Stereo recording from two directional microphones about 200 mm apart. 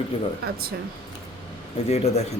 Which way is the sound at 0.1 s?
30° left (ahead or behind).